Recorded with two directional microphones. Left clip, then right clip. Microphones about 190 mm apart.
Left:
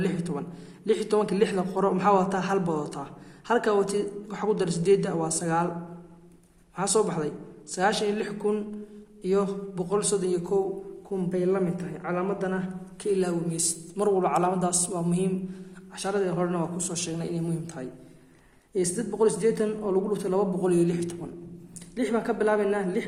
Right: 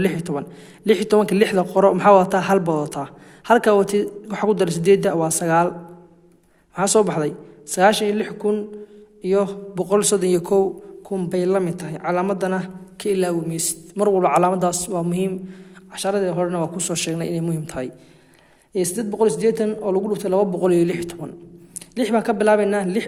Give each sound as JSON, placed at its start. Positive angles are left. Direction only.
{"t": 0.0, "sound": "a man's voice", "side_deg": -40}
{"t": 6.7, "sound": "a man's voice", "side_deg": -40}